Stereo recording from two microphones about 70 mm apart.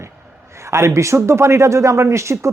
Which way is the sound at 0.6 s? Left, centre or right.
Right.